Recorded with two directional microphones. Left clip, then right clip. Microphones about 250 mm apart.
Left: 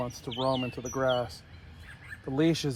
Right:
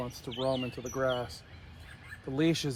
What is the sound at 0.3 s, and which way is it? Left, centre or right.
Speech, left.